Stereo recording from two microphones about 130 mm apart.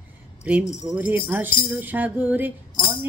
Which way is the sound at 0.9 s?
15° right (ahead or behind).